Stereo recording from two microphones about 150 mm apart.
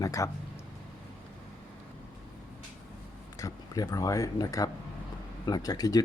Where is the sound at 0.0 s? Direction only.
20° left (ahead or behind).